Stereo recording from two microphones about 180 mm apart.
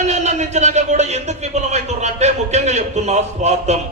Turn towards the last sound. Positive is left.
turn(degrees=-40)  # may be behind; listen again after turning